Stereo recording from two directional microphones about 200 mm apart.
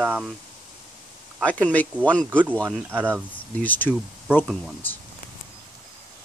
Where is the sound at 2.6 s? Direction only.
10° right (ahead or behind).